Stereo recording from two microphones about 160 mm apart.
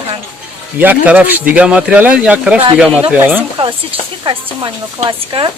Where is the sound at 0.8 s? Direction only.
10° right (ahead or behind).